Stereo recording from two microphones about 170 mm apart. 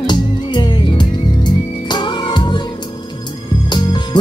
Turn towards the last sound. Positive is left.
turn(degrees=25)  # may be behind; listen again after turning